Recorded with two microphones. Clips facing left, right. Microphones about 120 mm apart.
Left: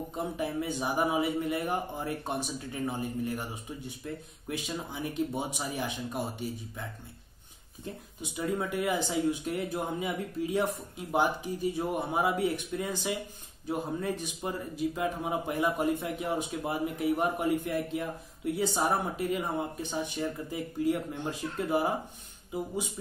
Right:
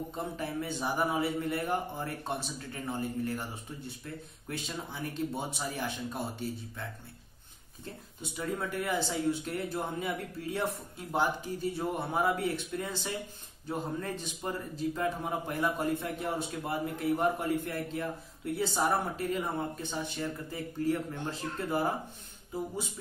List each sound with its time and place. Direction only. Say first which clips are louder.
0.1 s a man's voice: left 3 dB; 15° left (ahead or behind)
7.8 s a man's voice: left 3 dB; 15° left (ahead or behind)